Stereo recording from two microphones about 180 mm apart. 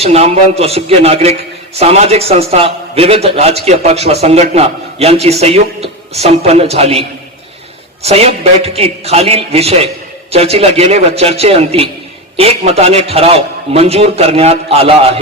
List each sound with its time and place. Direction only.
0.0 s a man's voice: 35° right (ahead or behind)
8.0 s a man's voice: 35° right (ahead or behind)